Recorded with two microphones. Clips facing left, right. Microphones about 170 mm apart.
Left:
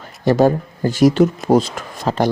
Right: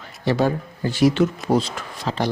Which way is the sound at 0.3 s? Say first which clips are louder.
Left 6 dB; 45° left (ahead or behind).